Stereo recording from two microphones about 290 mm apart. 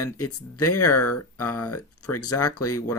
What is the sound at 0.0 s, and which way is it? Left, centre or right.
Speech, left.